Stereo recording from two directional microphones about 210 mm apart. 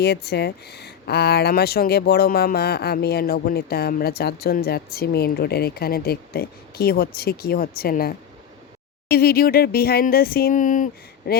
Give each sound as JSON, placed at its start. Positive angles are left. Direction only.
{"t": 0.0, "sound": "speech", "side_deg": 50}